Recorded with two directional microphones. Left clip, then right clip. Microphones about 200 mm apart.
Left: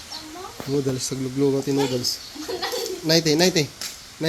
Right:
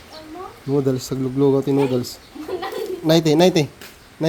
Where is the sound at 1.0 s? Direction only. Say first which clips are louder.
Right 4 dB; 20° right (ahead or behind).